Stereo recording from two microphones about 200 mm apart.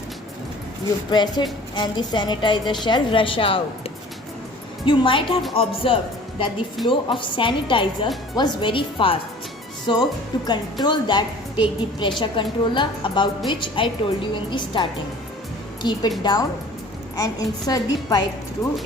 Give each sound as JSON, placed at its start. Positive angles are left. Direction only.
{"t": 1.1, "sound": "a woman's voice", "side_deg": 20}